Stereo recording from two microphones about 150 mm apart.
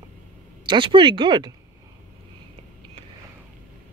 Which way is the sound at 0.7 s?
35° right (ahead or behind).